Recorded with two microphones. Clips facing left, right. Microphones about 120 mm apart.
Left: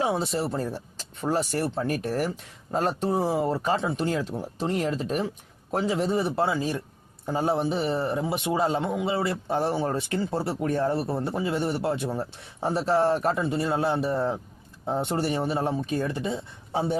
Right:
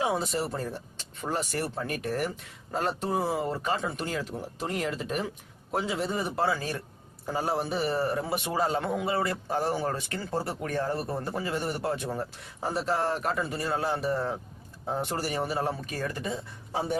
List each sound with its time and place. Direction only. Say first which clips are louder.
0.0 s speech: left 2 dB; 30° left (ahead or behind)
6.4 s a man's voice: left 3 dB; 15° left (ahead or behind)